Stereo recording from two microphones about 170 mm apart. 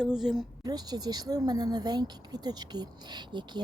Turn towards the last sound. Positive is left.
turn(degrees=-25)  # may be behind; listen again after turning